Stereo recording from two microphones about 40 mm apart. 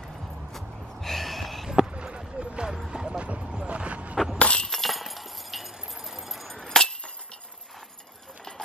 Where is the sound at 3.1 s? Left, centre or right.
Right.